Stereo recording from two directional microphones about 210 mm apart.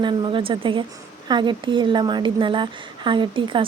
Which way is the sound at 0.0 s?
20° right (ahead or behind).